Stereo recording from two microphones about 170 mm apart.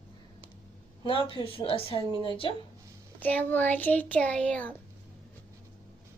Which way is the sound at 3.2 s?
10° left (ahead or behind).